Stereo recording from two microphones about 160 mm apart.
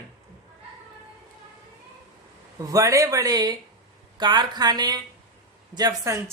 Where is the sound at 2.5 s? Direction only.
20° right (ahead or behind).